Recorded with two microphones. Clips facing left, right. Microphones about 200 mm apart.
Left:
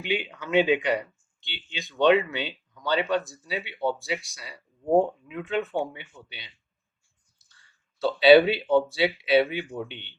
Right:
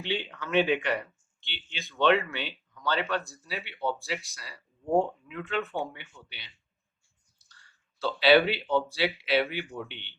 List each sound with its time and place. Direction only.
0.0 s speech: 10° left (ahead or behind)
8.3 s speech: 15° left (ahead or behind)